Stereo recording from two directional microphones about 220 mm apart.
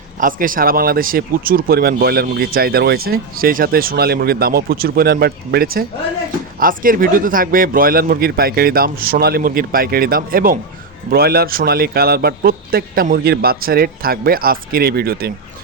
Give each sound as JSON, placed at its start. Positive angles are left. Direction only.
{"t": 0.2, "sound": "speech", "side_deg": -40}